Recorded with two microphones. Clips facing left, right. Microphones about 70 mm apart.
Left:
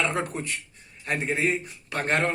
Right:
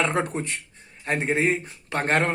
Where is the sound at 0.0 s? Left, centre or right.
Right.